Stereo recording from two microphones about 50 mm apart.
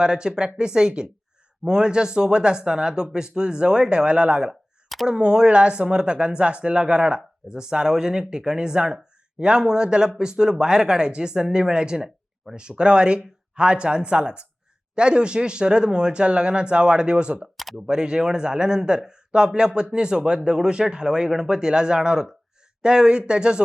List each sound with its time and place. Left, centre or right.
0.0 s speech: centre